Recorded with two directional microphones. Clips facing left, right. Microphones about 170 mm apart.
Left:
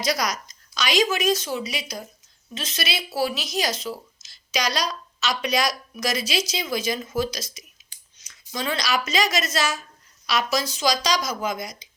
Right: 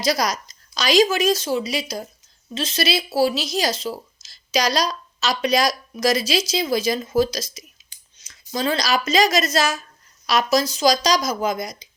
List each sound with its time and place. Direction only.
0.0 s speech: 30° right (ahead or behind)